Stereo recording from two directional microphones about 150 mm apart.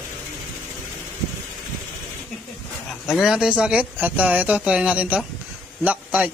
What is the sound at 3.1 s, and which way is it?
A man's voice, centre (ahead or behind).